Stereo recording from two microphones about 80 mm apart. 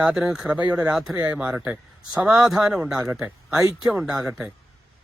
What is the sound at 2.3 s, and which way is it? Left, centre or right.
Speech, centre.